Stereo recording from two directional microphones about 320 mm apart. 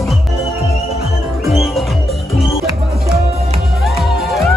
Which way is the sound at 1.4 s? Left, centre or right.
Centre.